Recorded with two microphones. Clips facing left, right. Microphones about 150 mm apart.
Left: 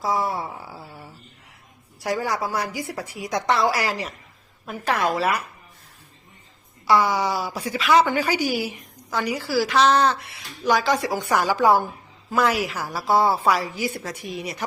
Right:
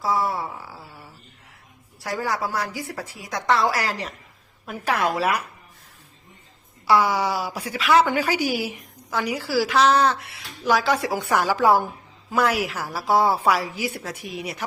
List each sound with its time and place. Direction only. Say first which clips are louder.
2.0 s a woman's voice: left 2 dB; 15° left (ahead or behind)
4.6 s a woman's voice: even; 10° right (ahead or behind)
6.8 s a woman's voice: even; 10° right (ahead or behind)